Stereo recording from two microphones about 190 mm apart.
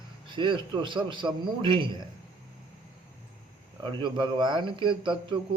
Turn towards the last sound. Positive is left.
turn(degrees=-25)  # may be behind; listen again after turning